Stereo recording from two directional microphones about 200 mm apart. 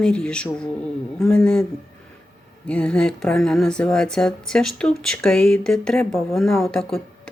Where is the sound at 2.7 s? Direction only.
5° left (ahead or behind).